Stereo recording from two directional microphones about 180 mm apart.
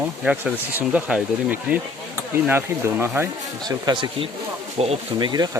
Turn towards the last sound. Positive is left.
turn(degrees=-25)  # may be behind; listen again after turning